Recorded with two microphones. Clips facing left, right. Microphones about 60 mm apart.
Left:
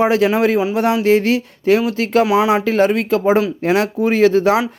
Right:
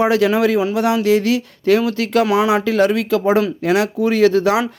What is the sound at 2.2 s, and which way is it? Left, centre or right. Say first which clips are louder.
Speech: left 1 dB; centre.